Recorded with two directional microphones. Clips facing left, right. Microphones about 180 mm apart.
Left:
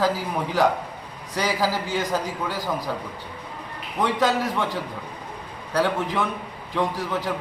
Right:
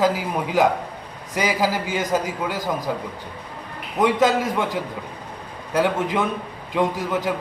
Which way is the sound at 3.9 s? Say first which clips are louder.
Right 4 dB; 15° right (ahead or behind).